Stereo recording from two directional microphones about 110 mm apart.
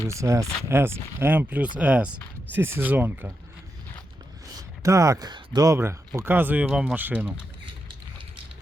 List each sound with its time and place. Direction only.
0.1 s speech: 25° right (ahead or behind)
4.5 s a sound: 30° right (ahead or behind)
5.3 s speech: 35° right (ahead or behind); by 7.3 s 15° right (ahead or behind)